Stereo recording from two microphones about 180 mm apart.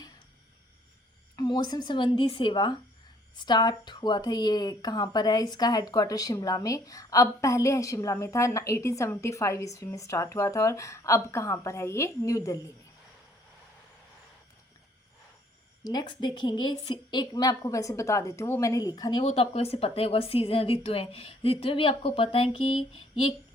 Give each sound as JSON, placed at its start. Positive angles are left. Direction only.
{"t": 1.4, "sound": "a woman's voice", "side_deg": 25}
{"t": 15.8, "sound": "a woman's voice", "side_deg": 25}
{"t": 19.2, "sound": "a woman's voice", "side_deg": 35}